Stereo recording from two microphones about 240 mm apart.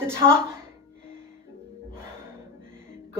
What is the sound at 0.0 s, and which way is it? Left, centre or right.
Speech, centre.